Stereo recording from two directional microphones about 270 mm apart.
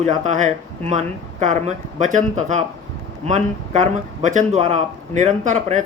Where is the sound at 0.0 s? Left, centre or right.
Right.